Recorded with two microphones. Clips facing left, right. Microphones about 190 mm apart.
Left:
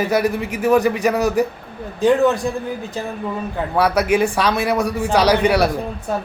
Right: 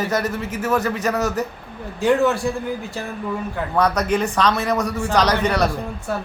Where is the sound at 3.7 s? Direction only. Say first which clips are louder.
Left 3 dB; 10° left (ahead or behind).